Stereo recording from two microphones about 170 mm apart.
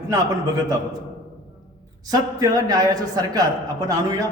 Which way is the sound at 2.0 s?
20° right (ahead or behind).